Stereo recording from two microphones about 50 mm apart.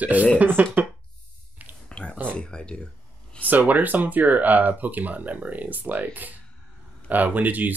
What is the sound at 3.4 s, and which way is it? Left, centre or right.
Speech, right.